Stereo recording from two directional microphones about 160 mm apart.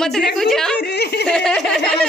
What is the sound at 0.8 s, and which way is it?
Speech, 90° left.